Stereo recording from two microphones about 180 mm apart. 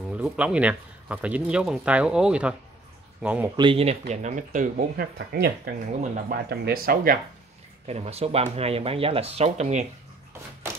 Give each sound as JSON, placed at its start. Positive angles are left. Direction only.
{"t": 0.1, "sound": "speech", "side_deg": -5}
{"t": 3.5, "sound": "speech", "side_deg": -30}
{"t": 6.1, "sound": "speech", "side_deg": -45}
{"t": 6.5, "sound": "speech", "side_deg": -60}
{"t": 7.8, "sound": "speech", "side_deg": -35}